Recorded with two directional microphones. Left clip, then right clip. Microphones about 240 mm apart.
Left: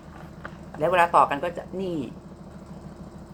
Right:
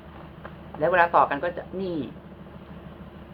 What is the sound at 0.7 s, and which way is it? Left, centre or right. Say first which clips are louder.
Speech: even; centre.